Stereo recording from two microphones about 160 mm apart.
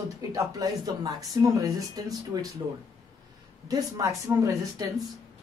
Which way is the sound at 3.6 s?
25° right (ahead or behind).